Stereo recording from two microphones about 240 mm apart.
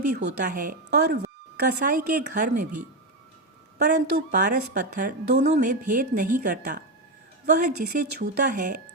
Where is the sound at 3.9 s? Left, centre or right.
Right.